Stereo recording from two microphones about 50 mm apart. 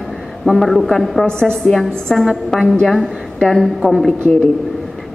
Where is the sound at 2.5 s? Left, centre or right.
Centre.